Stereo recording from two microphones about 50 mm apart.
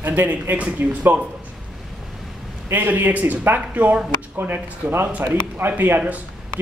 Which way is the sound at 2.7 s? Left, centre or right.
Right.